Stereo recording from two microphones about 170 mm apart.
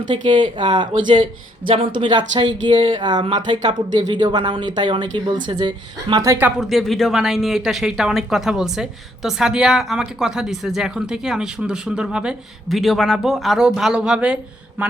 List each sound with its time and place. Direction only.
0.1 s speech: 30° right (ahead or behind)
6.6 s speech: centre (ahead or behind)
14.8 s mantra: 10° right (ahead or behind)